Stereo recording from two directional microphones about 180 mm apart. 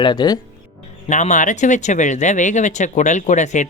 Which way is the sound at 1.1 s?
40° left (ahead or behind).